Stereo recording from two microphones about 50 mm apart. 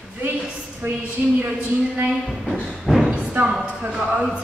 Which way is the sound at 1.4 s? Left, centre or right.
Right.